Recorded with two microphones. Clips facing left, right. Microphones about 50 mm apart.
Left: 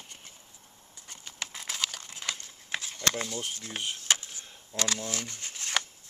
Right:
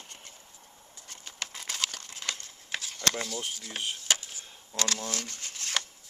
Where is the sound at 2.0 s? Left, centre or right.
Centre.